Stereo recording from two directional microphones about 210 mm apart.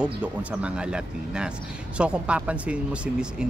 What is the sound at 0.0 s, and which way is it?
Speech, 5° right (ahead or behind).